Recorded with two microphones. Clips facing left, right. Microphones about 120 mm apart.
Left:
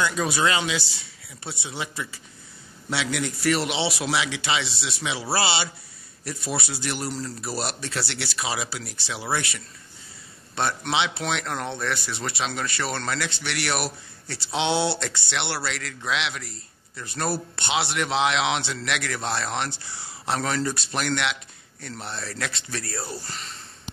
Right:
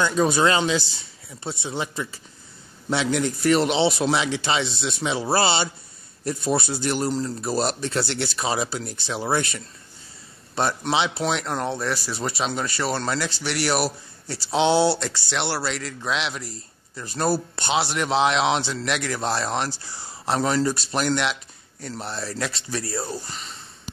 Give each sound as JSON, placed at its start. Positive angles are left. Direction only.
{"t": 0.0, "sound": "a man's voice", "side_deg": -30}
{"t": 6.2, "sound": "a man's voice", "side_deg": -25}
{"t": 7.1, "sound": "a man's voice", "side_deg": -20}
{"t": 8.0, "sound": "speech", "side_deg": -45}
{"t": 8.4, "sound": "speech", "side_deg": -30}
{"t": 8.8, "sound": "speech", "side_deg": -45}
{"t": 10.5, "sound": "a man's voice", "side_deg": -30}